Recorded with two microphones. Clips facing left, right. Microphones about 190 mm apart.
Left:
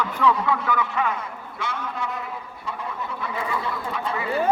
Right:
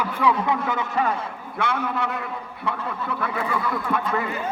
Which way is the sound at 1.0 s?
35° right (ahead or behind).